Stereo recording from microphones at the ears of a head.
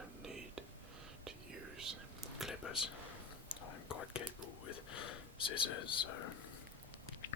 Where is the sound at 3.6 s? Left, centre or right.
Left.